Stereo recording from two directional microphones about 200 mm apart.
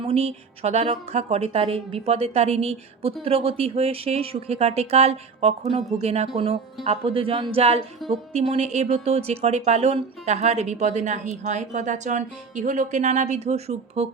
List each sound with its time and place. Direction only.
0.0 s a woman's voice: 30° right (ahead or behind)